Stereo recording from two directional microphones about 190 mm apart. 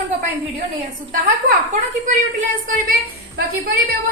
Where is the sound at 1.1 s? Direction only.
45° right (ahead or behind).